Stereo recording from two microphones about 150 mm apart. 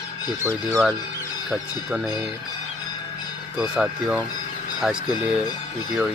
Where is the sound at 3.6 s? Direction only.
5° right (ahead or behind).